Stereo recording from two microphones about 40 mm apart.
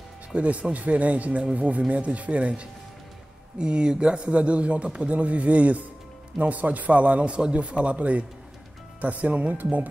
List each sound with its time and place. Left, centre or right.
0.3 s a man's voice: right